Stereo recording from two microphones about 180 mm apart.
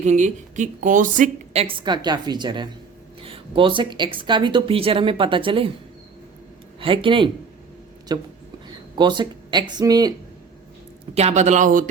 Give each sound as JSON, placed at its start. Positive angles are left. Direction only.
{"t": 0.0, "sound": "a woman's voice", "side_deg": -40}
{"t": 1.6, "sound": "a woman's voice", "side_deg": -25}
{"t": 6.7, "sound": "a woman's voice", "side_deg": -30}
{"t": 11.1, "sound": "speech", "side_deg": -35}